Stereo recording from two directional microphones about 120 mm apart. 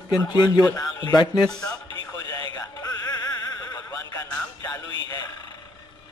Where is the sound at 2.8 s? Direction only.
30° left (ahead or behind).